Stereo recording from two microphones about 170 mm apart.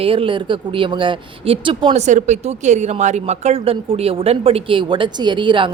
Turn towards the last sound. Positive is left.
turn(degrees=-30)  # may be behind; listen again after turning